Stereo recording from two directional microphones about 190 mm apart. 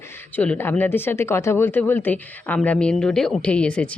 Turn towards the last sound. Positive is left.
turn(degrees=5)  # may be behind; listen again after turning